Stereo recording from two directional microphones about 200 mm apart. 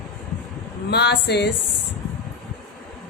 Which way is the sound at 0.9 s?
55° left (ahead or behind).